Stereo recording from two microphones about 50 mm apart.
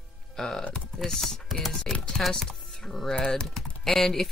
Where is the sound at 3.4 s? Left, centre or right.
Centre.